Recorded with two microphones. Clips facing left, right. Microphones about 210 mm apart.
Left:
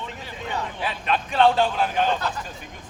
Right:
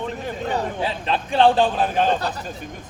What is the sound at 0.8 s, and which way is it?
A man's voice, 30° right (ahead or behind).